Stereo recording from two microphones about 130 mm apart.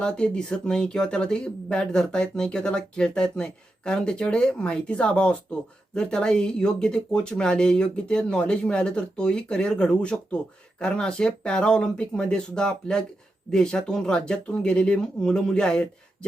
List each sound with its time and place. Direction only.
0.0 s speech: 5° left (ahead or behind)